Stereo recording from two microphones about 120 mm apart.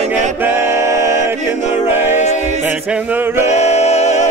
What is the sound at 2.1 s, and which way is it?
A capella, 75° left (ahead or behind).